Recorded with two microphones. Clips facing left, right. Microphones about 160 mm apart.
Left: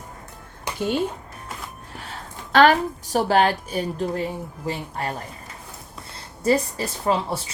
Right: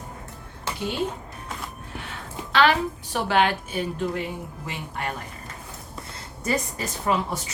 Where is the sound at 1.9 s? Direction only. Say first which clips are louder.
Right 1 dB; 40° left (ahead or behind).